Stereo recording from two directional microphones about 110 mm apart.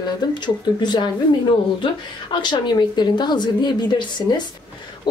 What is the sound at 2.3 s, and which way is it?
Speech, 45° left (ahead or behind).